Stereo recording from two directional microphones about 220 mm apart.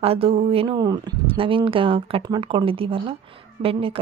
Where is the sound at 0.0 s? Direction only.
25° right (ahead or behind).